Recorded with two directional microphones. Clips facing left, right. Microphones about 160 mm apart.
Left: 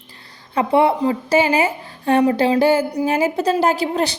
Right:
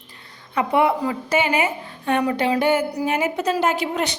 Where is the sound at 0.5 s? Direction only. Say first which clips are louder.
Left 3 dB; 30° left (ahead or behind).